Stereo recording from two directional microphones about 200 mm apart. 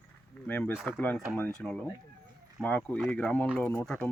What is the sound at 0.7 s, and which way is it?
Speech, 5° right (ahead or behind).